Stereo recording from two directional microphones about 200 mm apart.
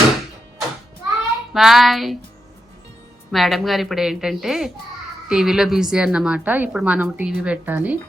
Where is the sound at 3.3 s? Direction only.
Centre (ahead or behind).